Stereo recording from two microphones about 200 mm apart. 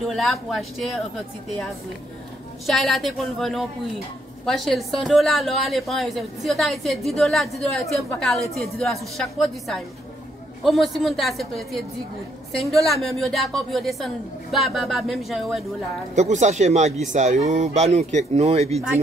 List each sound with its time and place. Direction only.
0.0 s a woman's voice: centre (ahead or behind)
2.6 s a woman's voice: centre (ahead or behind)
16.2 s speech: 35° right (ahead or behind)